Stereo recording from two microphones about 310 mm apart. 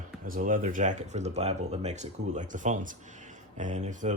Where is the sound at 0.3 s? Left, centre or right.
Right.